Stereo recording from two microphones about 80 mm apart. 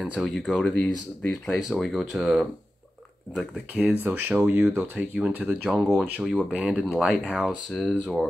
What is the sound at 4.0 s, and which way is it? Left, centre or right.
Speech, right.